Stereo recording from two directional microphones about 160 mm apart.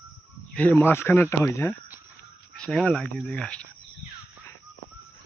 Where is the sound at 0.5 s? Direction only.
10° left (ahead or behind).